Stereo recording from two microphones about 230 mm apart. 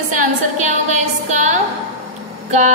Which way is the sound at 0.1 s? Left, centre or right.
Right.